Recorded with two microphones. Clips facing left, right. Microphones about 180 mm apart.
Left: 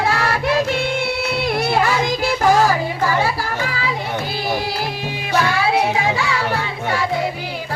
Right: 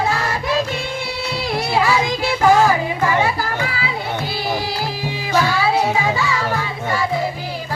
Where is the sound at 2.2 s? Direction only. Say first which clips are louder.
Right 1 dB; 40° left (ahead or behind).